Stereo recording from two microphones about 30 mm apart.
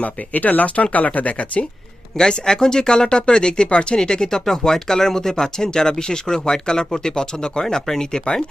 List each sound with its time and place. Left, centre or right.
0.0 s speech: left
2.3 s speech: left